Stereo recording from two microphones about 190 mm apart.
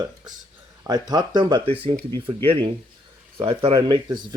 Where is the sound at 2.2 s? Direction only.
30° right (ahead or behind).